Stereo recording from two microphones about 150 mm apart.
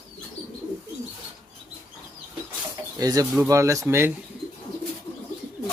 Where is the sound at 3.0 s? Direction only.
25° right (ahead or behind).